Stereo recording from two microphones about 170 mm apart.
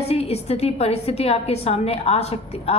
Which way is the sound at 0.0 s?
35° left (ahead or behind).